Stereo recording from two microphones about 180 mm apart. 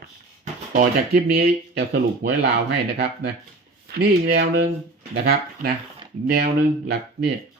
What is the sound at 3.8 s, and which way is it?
Speech, 60° right (ahead or behind).